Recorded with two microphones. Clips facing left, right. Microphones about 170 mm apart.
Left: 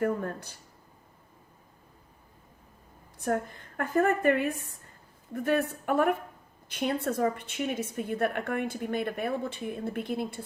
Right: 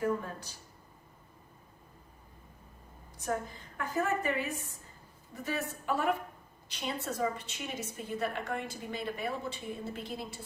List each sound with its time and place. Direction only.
0.0 s a woman's voice: 60° left (ahead or behind)
3.2 s a woman's voice: 60° left (ahead or behind)